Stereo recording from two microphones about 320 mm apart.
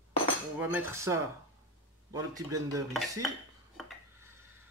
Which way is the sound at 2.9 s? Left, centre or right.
Centre.